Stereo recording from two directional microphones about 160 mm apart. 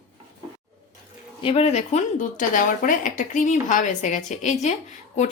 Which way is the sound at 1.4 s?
40° left (ahead or behind).